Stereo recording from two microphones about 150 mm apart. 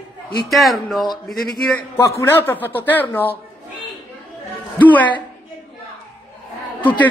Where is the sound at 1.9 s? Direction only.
15° left (ahead or behind).